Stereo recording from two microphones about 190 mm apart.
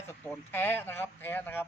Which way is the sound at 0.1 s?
10° left (ahead or behind).